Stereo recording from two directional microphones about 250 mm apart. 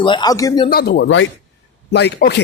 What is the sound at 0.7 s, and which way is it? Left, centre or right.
Speech, left.